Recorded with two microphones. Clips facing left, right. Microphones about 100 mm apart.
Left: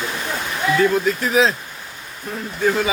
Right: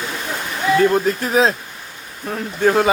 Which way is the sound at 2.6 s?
55° right (ahead or behind).